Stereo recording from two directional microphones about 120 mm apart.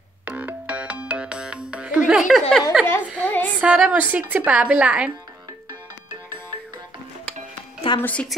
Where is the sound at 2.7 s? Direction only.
5° right (ahead or behind).